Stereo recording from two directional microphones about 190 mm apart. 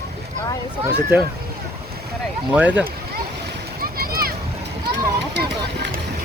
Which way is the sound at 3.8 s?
50° right (ahead or behind).